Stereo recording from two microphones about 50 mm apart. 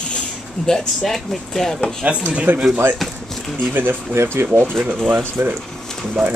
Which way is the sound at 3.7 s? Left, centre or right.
Right.